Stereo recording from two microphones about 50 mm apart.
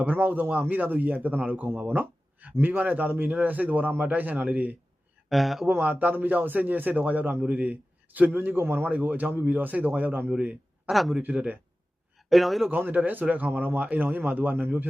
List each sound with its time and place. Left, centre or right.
0.0 s a man's voice: right
5.3 s speech: centre
5.8 s a man's voice: right
10.2 s a man's voice: right
10.8 s speech: centre
12.7 s a man's voice: right